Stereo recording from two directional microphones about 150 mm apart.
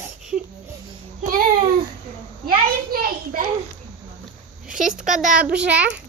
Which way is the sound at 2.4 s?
70° right (ahead or behind).